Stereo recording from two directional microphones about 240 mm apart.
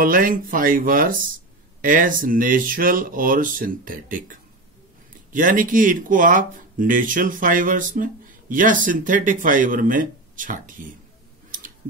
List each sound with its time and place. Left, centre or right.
0.0 s speech: right